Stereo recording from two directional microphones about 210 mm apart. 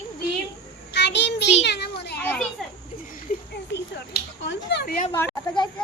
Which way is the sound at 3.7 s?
55° left (ahead or behind).